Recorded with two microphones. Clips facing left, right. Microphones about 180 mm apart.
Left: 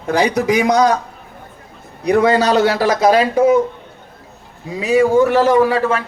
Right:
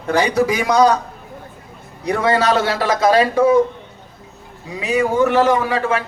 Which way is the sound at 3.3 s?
20° left (ahead or behind).